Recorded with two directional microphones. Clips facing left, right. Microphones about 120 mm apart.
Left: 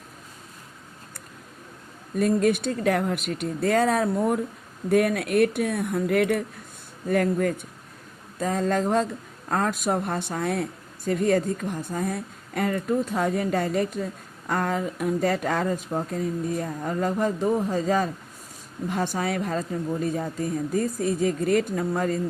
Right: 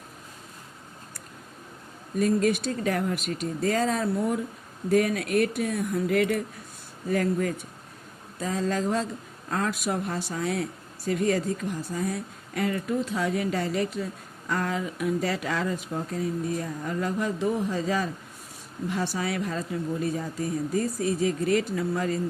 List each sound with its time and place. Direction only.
2.1 s speech: 50° left (ahead or behind)